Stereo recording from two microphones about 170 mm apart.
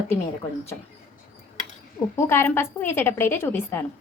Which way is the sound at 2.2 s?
15° left (ahead or behind).